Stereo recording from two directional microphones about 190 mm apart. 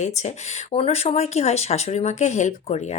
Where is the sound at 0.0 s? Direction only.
35° left (ahead or behind).